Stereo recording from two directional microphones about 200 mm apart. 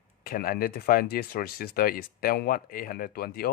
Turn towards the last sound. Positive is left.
turn(degrees=50)  # may be behind; listen again after turning